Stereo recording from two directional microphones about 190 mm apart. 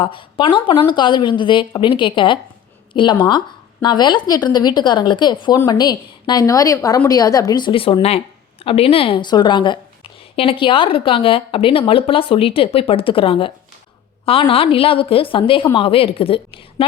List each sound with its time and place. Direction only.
0.0 s a woman's voice: 25° left (ahead or behind)